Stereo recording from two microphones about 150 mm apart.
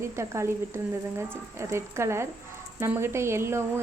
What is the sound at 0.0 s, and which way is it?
Speech, 20° right (ahead or behind).